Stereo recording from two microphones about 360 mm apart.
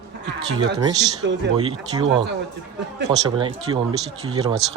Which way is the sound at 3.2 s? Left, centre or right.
Centre.